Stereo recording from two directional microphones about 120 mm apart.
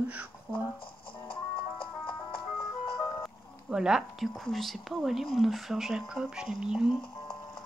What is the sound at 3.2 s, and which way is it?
Speech, 5° right (ahead or behind).